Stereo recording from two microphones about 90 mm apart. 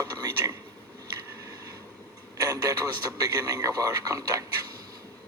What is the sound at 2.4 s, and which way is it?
A man's voice, 45° right (ahead or behind).